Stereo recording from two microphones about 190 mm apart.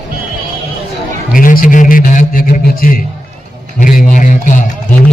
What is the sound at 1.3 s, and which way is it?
A man's voice, 45° left (ahead or behind).